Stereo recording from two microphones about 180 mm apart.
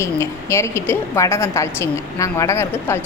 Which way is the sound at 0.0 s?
15° left (ahead or behind).